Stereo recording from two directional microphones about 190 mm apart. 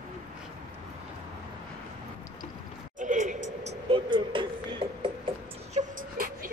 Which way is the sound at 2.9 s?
40° right (ahead or behind).